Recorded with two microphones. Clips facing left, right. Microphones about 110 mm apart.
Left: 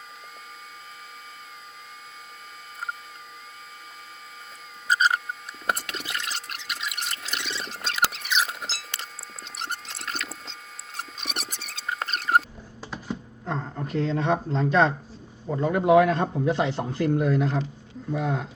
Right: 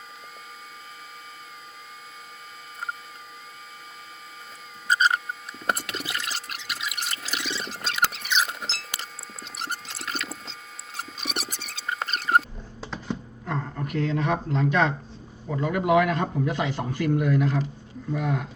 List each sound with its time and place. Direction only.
4.9 s rodents: centre (ahead or behind)
5.6 s water: centre (ahead or behind)
9.0 s a sound: centre (ahead or behind)
13.4 s speech: 35° left (ahead or behind)